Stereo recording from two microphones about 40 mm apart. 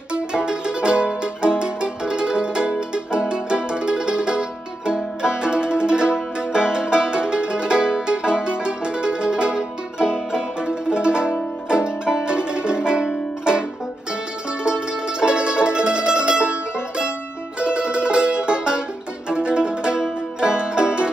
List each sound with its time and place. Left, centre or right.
0.1 s music: right
17.6 s music: right